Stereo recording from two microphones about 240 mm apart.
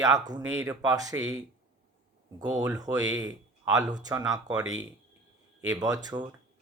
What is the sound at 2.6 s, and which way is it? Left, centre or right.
Speech, centre.